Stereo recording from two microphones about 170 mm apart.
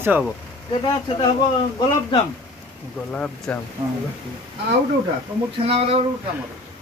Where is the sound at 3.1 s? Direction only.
10° left (ahead or behind).